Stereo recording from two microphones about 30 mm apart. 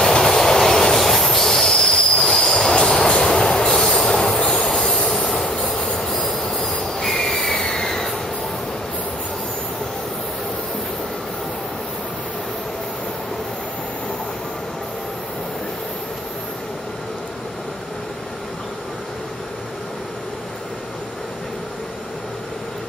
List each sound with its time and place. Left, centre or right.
0.0 s train: centre
2.5 s train: left
2.9 s train: centre
5.1 s train wheels squealing: centre
7.0 s owl: centre
7.6 s a sound: centre